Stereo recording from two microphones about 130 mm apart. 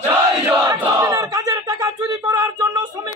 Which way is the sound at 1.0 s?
25° right (ahead or behind).